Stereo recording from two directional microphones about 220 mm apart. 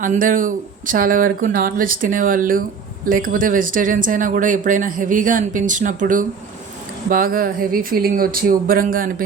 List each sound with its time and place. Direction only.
0.0 s speech: 35° right (ahead or behind)